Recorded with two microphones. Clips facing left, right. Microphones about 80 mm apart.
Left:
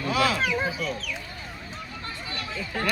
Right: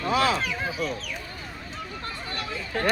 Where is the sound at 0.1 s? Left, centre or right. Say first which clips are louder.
Right 1 dB; right.